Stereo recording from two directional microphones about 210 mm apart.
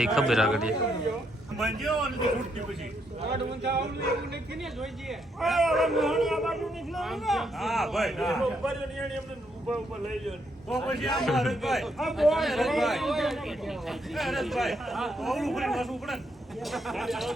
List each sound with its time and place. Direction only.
0.0 s a man's voice: centre (ahead or behind)
3.2 s speech: 55° right (ahead or behind)
4.6 s a man's voice: centre (ahead or behind)
10.2 s a man's voice: centre (ahead or behind)